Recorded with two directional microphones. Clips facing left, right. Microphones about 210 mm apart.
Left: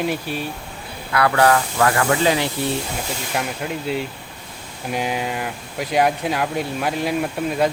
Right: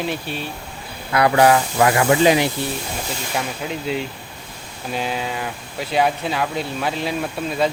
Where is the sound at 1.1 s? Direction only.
20° right (ahead or behind).